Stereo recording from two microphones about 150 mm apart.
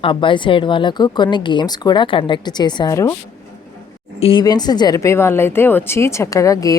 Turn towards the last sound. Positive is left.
turn(degrees=25)  # may be behind; listen again after turning